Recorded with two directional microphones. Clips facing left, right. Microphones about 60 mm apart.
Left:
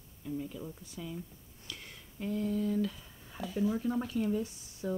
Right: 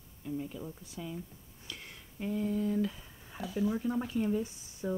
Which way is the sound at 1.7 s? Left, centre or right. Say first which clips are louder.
Even; centre.